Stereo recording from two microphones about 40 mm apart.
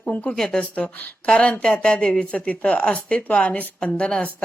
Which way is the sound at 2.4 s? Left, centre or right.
Left.